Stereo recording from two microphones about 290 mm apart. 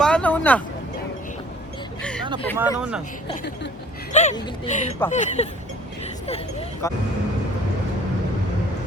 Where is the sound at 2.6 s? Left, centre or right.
Centre.